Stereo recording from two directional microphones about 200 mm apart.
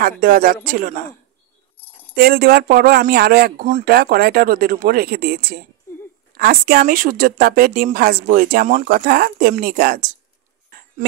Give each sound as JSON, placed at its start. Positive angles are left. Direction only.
{"t": 0.2, "sound": "speech", "side_deg": -45}
{"t": 2.1, "sound": "speech", "side_deg": -50}
{"t": 5.9, "sound": "a sound", "side_deg": 15}
{"t": 6.3, "sound": "speech", "side_deg": -50}